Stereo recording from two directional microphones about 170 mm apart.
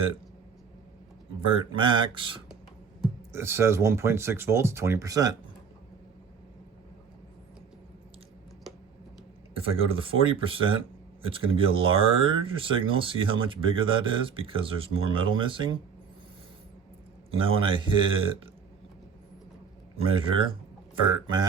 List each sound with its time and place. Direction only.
1.5 s speech: 30° right (ahead or behind)
3.3 s speech: 15° right (ahead or behind)
9.6 s speech: 30° right (ahead or behind)
17.3 s speech: 30° right (ahead or behind)
20.0 s speech: 30° right (ahead or behind)